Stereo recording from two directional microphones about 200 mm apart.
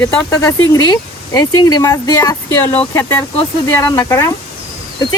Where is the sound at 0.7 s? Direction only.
20° left (ahead or behind).